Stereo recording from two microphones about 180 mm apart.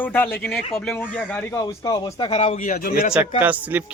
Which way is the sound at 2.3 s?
40° left (ahead or behind).